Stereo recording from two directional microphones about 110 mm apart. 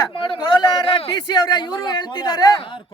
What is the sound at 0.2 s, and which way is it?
A man's voice, 45° left (ahead or behind).